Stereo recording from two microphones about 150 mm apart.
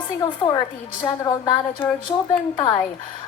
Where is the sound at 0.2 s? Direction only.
30° left (ahead or behind).